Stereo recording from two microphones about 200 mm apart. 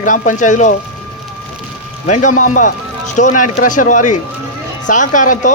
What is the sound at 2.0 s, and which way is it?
Speech, 35° left (ahead or behind).